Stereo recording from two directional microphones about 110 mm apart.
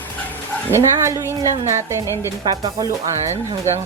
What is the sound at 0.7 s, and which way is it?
Speech, 25° right (ahead or behind).